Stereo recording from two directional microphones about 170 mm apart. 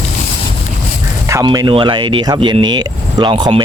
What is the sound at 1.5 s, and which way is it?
Speech, 30° right (ahead or behind).